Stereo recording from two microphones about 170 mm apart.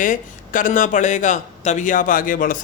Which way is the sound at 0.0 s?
50° left (ahead or behind).